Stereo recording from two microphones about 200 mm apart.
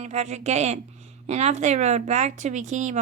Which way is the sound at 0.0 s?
35° right (ahead or behind).